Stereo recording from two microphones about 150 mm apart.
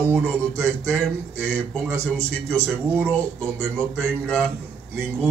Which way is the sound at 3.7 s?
5° left (ahead or behind).